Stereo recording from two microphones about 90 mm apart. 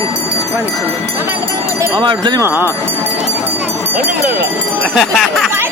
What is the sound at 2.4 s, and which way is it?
Speech, 25° right (ahead or behind).